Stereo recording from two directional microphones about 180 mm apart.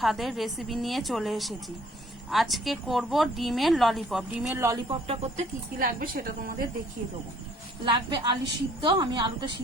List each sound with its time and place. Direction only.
0.0 s speech: centre (ahead or behind)
4.5 s speech: 15° right (ahead or behind)
4.9 s speech: 35° right (ahead or behind)
5.8 s a woman's voice: 50° right (ahead or behind)
7.9 s a woman's voice: 25° right (ahead or behind)